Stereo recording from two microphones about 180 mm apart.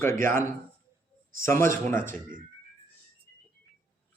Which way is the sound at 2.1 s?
45° right (ahead or behind).